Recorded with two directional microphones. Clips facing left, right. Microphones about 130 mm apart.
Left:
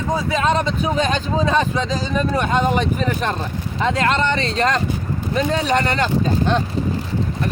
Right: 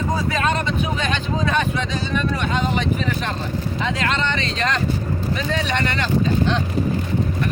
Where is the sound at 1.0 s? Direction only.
35° left (ahead or behind).